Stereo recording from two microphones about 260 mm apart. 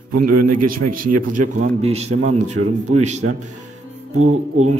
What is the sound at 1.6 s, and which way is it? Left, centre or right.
A man's voice, right.